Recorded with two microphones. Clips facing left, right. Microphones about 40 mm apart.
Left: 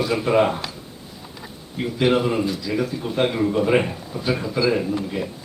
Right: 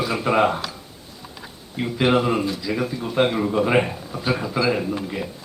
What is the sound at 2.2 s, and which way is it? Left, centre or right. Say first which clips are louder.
A man's voice: even; centre.